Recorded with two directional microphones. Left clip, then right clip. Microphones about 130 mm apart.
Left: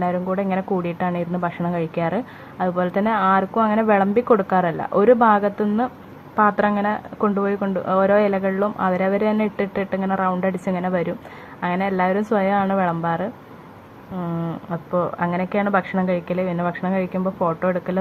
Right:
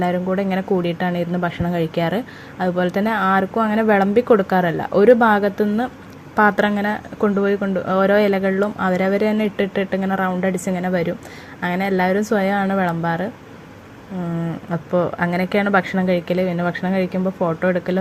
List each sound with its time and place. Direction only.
0.0 s a woman's voice: 15° right (ahead or behind)
14.7 s a woman's voice: 25° right (ahead or behind)